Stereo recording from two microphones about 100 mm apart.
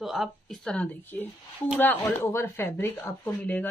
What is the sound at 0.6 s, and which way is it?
Speech, 15° left (ahead or behind).